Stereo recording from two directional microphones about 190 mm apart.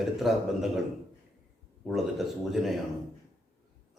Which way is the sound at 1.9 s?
Centre (ahead or behind).